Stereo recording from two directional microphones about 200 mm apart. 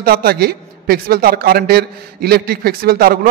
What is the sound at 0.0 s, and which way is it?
A man's voice, 50° right (ahead or behind).